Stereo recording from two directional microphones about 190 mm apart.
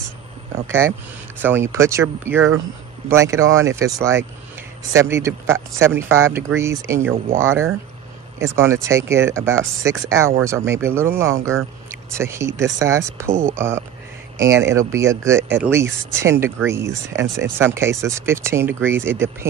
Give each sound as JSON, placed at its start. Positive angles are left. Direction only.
{"t": 0.7, "sound": "speech", "side_deg": -10}